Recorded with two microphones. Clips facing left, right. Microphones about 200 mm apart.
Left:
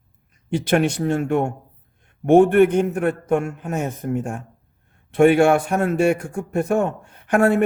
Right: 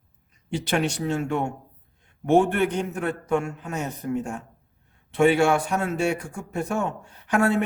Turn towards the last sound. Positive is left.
turn(degrees=55)  # may be behind; listen again after turning